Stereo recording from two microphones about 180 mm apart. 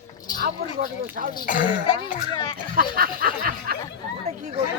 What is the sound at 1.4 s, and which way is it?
Speech, 50° left (ahead or behind).